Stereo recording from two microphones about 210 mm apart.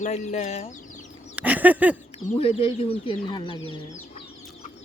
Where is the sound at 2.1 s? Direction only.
30° left (ahead or behind).